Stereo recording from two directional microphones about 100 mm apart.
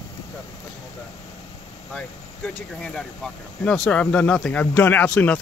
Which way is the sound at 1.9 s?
10° left (ahead or behind).